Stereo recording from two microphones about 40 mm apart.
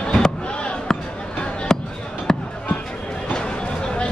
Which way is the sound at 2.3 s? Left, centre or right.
Centre.